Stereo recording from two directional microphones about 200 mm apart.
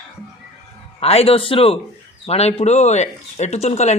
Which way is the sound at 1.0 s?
30° left (ahead or behind).